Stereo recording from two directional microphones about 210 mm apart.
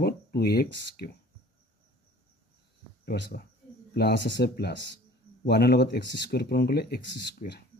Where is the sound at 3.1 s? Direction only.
45° left (ahead or behind).